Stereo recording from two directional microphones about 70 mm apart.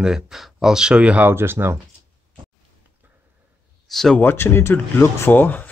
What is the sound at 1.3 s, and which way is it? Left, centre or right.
Speech, right.